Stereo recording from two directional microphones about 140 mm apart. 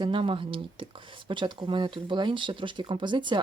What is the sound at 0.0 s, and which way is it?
Speech, 40° right (ahead or behind).